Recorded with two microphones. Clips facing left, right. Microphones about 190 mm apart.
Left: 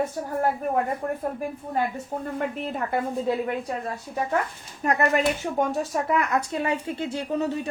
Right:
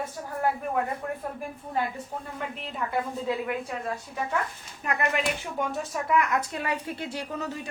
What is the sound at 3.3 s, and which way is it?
A woman's voice, 35° left (ahead or behind).